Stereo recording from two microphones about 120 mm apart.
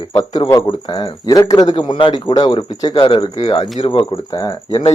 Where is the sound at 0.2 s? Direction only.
30° left (ahead or behind); by 4.2 s 50° left (ahead or behind).